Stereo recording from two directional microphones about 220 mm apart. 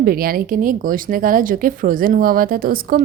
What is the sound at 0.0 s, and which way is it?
A woman's voice, 40° right (ahead or behind).